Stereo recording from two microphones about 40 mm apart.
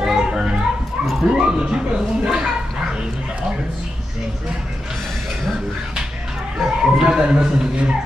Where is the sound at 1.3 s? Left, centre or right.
Right.